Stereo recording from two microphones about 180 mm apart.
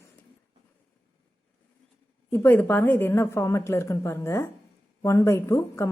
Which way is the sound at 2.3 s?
10° left (ahead or behind).